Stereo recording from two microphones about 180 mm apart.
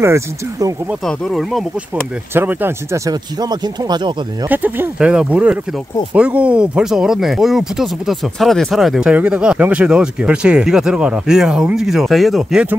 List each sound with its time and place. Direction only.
0.0 s speech: 15° right (ahead or behind)
1.0 s speech: centre (ahead or behind)
2.3 s speech: 10° right (ahead or behind)
4.5 s speech: 10° right (ahead or behind)